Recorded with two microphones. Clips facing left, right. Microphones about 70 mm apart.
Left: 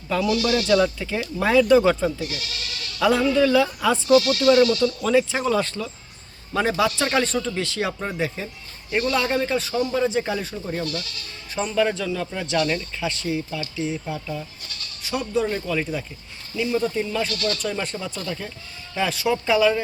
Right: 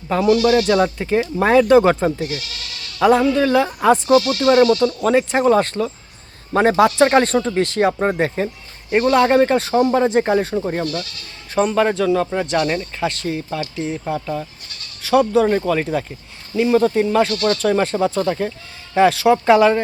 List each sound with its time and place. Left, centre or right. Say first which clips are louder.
0.1 s speech: right 7 dB; right
15.0 s speech: right 10 dB; right
16.6 s speech: right 8 dB; right
18.9 s speech: right 10 dB; right